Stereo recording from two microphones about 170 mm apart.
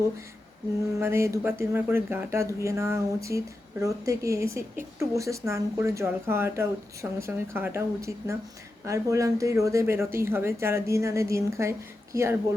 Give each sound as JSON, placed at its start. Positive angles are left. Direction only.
{"t": 0.9, "sound": "speech", "side_deg": -15}